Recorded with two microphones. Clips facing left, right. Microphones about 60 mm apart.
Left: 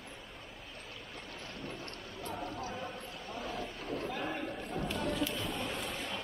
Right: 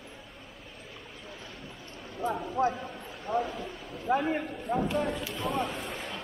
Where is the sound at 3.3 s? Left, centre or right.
Right.